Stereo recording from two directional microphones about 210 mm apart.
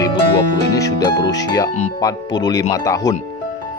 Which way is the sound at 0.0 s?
20° left (ahead or behind).